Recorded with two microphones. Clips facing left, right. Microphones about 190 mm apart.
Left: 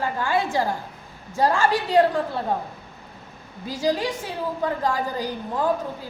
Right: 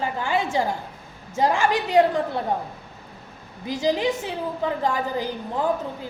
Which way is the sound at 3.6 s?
20° right (ahead or behind).